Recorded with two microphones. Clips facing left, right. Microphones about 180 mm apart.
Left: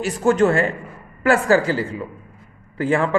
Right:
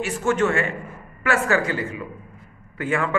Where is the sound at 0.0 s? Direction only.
35° left (ahead or behind).